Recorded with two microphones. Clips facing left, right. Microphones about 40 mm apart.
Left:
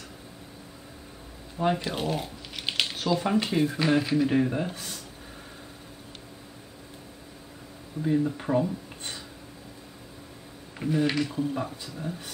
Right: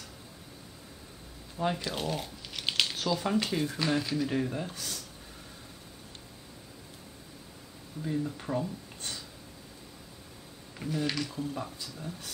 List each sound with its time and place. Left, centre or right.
1.6 s speech: centre
8.0 s speech: left
10.8 s speech: centre